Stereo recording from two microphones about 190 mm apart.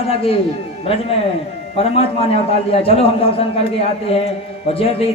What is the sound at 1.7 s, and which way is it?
A man's voice, 30° left (ahead or behind).